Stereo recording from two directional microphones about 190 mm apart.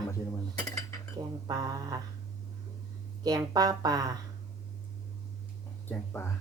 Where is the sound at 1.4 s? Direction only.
20° right (ahead or behind).